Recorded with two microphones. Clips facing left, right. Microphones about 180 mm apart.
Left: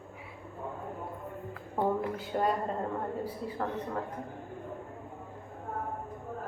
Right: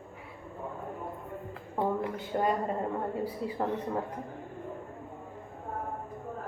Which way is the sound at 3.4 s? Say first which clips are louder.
Right 3 dB; 20° right (ahead or behind).